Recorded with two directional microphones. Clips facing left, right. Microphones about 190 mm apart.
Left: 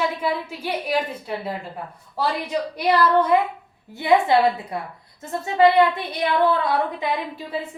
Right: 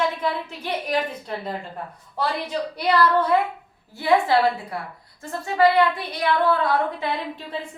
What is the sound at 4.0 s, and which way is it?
Speech, 20° left (ahead or behind).